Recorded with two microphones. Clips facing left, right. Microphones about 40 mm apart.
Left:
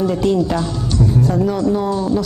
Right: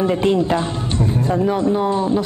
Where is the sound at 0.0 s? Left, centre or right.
Right.